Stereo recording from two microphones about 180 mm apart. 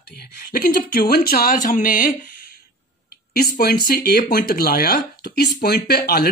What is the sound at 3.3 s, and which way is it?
Speech, 60° left (ahead or behind).